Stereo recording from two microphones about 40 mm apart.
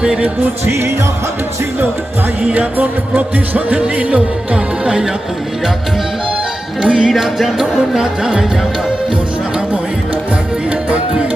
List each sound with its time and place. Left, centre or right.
0.0 s music: right
2.6 s music: right
6.8 s music: right
7.1 s music: centre